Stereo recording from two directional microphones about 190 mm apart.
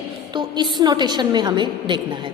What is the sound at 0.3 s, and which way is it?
A woman's voice, 25° right (ahead or behind).